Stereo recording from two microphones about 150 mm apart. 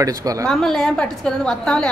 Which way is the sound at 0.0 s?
25° right (ahead or behind).